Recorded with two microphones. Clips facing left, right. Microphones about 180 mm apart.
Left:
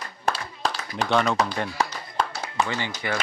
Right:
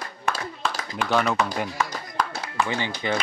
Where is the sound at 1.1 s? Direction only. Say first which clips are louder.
Even; 5° right (ahead or behind).